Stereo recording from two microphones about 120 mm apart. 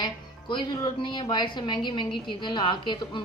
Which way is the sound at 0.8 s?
35° left (ahead or behind).